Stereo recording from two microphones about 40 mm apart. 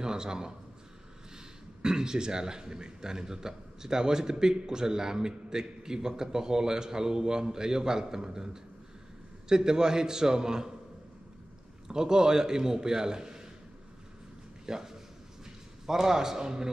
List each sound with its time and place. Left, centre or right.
0.0 s a man's voice: centre
1.8 s a man's voice: centre
9.5 s a man's voice: centre
11.9 s a man's voice: centre
14.7 s a man's voice: centre